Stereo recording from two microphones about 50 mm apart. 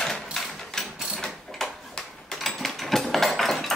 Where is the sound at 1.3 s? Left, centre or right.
Centre.